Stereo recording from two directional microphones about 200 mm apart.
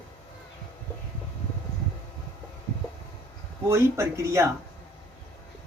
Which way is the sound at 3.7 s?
15° right (ahead or behind).